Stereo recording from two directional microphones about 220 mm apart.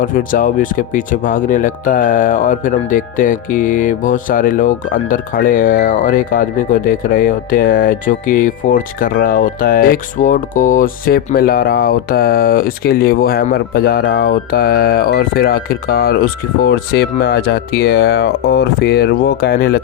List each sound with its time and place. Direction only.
0.0 s speech: 40° left (ahead or behind)